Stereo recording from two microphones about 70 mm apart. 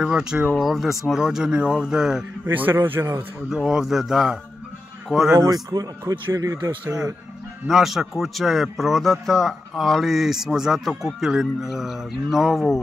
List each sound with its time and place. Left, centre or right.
0.0 s speech: centre
0.5 s speech: centre
2.4 s a man's voice: right
3.4 s a man's voice: centre
5.5 s speech: right
6.3 s speech: right
7.6 s a man's voice: centre